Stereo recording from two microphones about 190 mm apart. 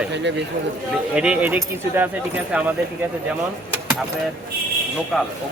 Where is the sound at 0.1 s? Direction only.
70° right (ahead or behind).